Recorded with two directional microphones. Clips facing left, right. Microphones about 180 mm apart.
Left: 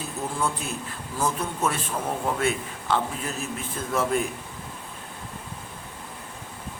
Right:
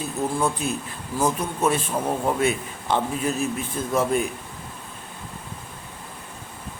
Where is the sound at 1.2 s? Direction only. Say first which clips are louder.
Right 4 dB; 15° right (ahead or behind).